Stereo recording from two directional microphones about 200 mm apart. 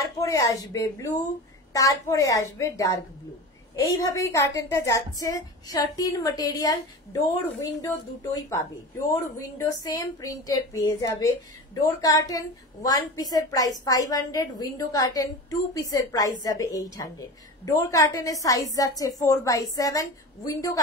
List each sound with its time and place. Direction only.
0.2 s a woman's voice: 15° left (ahead or behind)